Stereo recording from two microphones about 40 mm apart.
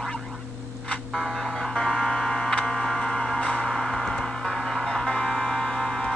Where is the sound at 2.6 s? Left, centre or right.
Centre.